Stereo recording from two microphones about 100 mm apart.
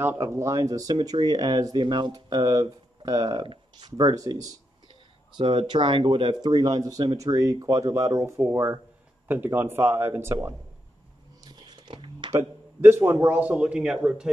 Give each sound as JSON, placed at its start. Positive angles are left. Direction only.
{"t": 0.0, "sound": "speech", "side_deg": -25}
{"t": 5.4, "sound": "speech", "side_deg": -55}
{"t": 11.4, "sound": "a sound", "side_deg": -45}
{"t": 12.3, "sound": "a man's voice", "side_deg": -25}